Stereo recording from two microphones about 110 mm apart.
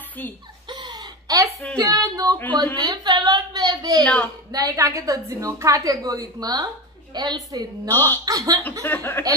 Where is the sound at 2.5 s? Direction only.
40° right (ahead or behind).